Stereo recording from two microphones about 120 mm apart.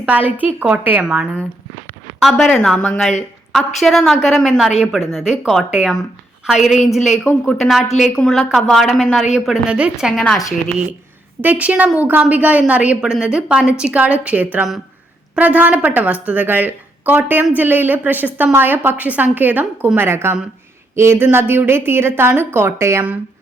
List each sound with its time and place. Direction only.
0.0 s a woman's voice: 10° right (ahead or behind)
11.4 s a woman's voice: 10° right (ahead or behind)